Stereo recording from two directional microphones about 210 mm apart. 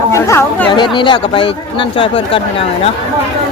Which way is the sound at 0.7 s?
20° left (ahead or behind).